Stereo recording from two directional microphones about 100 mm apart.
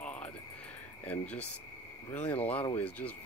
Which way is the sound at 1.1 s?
15° left (ahead or behind).